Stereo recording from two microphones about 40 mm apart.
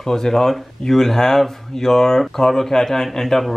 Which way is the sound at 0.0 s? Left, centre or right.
Centre.